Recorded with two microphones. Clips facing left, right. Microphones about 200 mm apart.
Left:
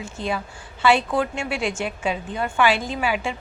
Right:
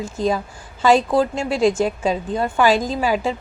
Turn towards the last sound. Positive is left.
turn(degrees=-40)  # may be behind; listen again after turning